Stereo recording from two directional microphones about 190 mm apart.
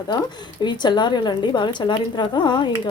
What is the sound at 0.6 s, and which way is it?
Speech, 25° left (ahead or behind).